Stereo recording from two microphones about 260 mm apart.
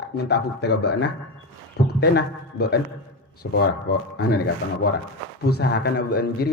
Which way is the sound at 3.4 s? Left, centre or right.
Left.